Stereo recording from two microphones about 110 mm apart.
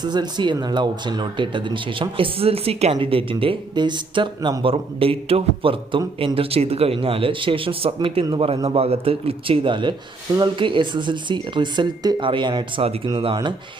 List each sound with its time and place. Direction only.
0.0 s speech: 40° right (ahead or behind)
4.6 s speech: 60° right (ahead or behind)
12.8 s speech: 65° right (ahead or behind)